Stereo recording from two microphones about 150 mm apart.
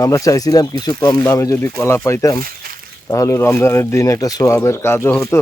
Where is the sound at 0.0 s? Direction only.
20° left (ahead or behind).